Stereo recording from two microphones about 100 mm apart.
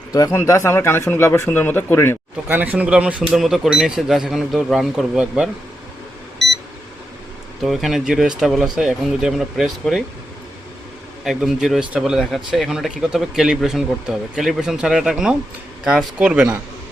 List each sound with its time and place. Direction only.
0.1 s a man's voice: 40° left (ahead or behind); by 2.1 s 25° left (ahead or behind)
2.5 s speech: 20° right (ahead or behind); by 5.2 s centre (ahead or behind)
7.6 s speech: centre (ahead or behind)
11.2 s speech: 5° right (ahead or behind)